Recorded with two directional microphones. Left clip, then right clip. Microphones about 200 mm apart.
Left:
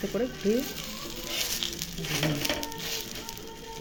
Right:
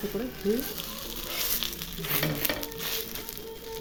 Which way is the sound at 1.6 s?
15° right (ahead or behind).